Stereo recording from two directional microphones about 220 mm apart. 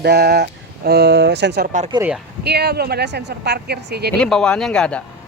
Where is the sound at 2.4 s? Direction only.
50° right (ahead or behind).